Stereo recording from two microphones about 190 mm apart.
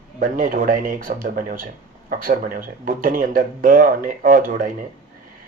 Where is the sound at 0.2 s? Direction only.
45° right (ahead or behind).